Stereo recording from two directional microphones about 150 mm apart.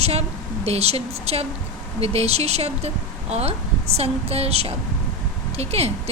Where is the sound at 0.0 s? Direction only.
45° right (ahead or behind).